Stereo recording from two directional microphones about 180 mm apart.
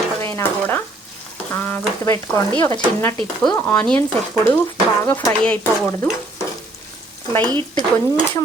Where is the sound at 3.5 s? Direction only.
10° left (ahead or behind).